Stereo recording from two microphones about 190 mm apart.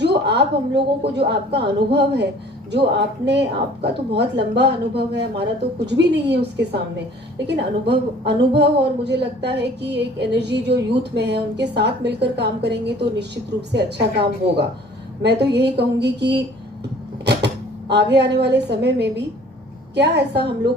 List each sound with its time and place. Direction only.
0.0 s a woman's voice: 60° right (ahead or behind)
3.2 s a woman's voice: 65° right (ahead or behind)
17.2 s a sound: 65° right (ahead or behind)
18.2 s a woman's voice: 65° right (ahead or behind)